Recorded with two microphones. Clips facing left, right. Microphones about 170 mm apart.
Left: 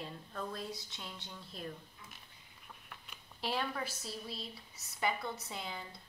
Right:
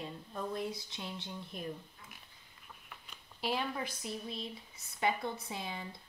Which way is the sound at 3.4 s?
10° right (ahead or behind).